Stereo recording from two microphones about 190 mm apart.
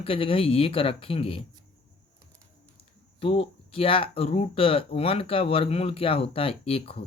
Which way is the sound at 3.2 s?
30° left (ahead or behind).